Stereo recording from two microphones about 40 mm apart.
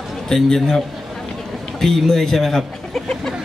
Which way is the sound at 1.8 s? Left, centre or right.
Centre.